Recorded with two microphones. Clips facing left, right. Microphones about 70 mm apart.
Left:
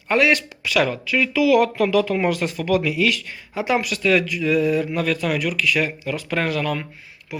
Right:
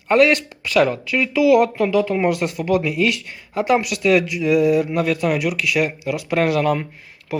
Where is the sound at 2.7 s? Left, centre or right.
Right.